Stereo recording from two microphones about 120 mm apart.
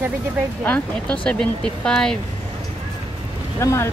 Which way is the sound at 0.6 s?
10° left (ahead or behind).